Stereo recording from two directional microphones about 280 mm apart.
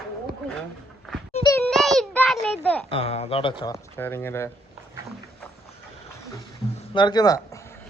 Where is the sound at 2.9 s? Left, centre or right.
Left.